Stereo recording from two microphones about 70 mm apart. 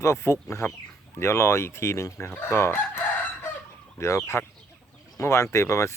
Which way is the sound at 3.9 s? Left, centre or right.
Left.